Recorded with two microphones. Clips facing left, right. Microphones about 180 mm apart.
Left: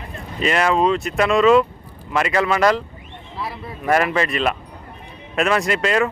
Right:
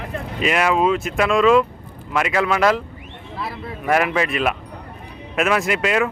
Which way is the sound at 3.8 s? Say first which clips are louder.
Left 1 dB; 5° right (ahead or behind).